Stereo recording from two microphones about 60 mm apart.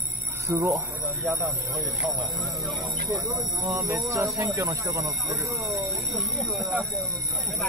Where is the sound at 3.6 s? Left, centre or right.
Right.